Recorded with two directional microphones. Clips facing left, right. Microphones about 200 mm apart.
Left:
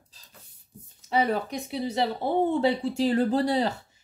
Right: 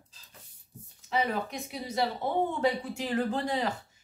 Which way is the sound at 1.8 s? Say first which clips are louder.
Left 3 dB; 30° left (ahead or behind).